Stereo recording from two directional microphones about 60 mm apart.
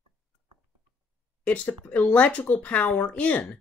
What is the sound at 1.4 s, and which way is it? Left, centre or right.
Speech, left.